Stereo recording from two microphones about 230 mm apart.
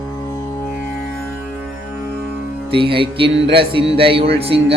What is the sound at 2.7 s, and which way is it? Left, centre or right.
Music, right.